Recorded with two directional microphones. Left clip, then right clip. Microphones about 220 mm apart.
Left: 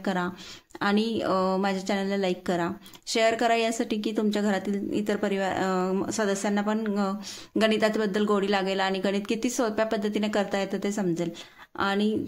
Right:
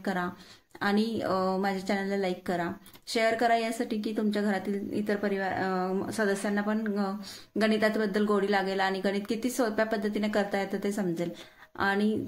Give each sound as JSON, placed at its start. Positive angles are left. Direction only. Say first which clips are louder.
{"t": 0.0, "sound": "speech", "louder": "left 3 dB", "side_deg": 30}